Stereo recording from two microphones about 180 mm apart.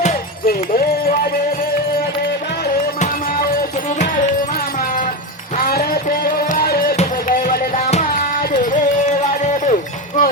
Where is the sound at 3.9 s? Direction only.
40° left (ahead or behind).